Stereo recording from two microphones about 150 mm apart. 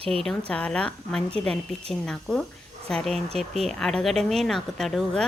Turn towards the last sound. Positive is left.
turn(degrees=0)  # may be behind; listen again after turning